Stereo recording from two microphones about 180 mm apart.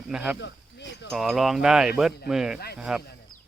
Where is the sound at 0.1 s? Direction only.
5° right (ahead or behind).